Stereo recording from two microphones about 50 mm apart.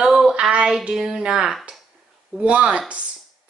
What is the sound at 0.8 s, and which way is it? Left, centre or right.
A woman's voice, centre.